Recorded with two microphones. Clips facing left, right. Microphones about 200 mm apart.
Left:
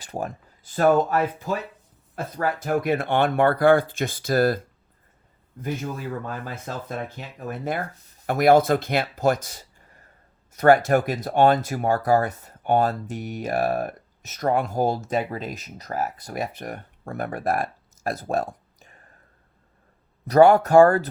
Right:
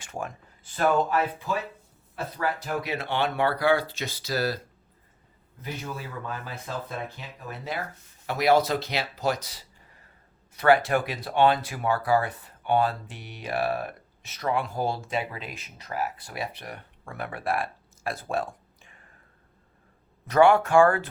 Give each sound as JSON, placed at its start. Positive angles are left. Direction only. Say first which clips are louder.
{"t": 0.0, "sound": "speech", "louder": "left 4 dB", "side_deg": 35}
{"t": 5.6, "sound": "speech", "louder": "left 6 dB", "side_deg": 45}
{"t": 20.2, "sound": "speech", "louder": "left 4 dB", "side_deg": 40}